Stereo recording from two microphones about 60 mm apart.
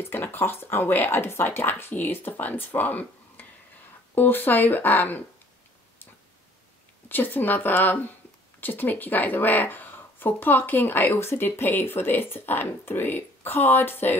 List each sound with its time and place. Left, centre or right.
0.0 s speech: left
7.1 s speech: left